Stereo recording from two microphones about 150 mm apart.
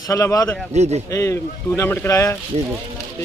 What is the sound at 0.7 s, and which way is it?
Speech, 45° right (ahead or behind).